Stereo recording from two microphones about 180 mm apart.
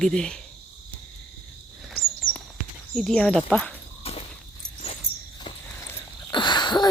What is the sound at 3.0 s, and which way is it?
Speech, centre (ahead or behind).